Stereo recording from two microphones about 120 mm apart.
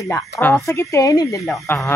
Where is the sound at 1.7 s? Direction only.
15° left (ahead or behind).